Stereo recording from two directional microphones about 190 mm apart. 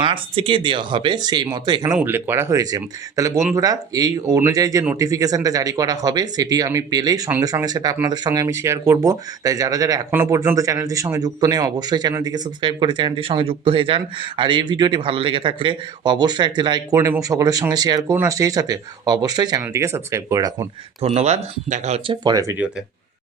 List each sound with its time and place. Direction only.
0.0 s speech: 25° right (ahead or behind)
2.0 s speech: 10° right (ahead or behind)
21.0 s speech: 35° right (ahead or behind)